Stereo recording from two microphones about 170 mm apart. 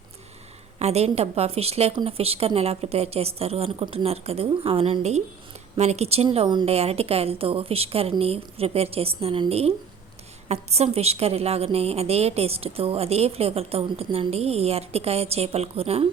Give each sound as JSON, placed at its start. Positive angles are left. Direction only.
{"t": 0.8, "sound": "a woman's voice", "side_deg": -40}